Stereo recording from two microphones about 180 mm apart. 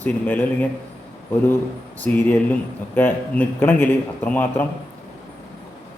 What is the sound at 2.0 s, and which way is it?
Speech, 10° left (ahead or behind).